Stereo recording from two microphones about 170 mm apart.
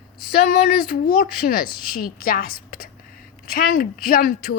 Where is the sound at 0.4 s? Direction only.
60° left (ahead or behind).